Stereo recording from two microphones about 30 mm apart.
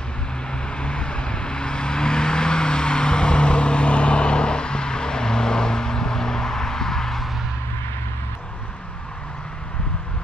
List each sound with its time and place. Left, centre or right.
0.5 s vehicle: left; by 7.2 s centre